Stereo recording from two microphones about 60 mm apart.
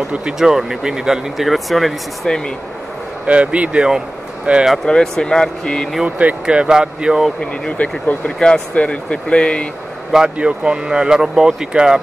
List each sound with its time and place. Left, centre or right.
0.1 s speech: centre
2.2 s speech: centre
3.3 s speech: right
4.8 s speech: centre
6.0 s speech: right
7.7 s speech: left
10.3 s speech: centre